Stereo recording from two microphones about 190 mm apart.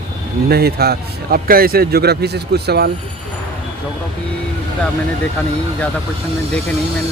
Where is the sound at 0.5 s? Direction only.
55° right (ahead or behind).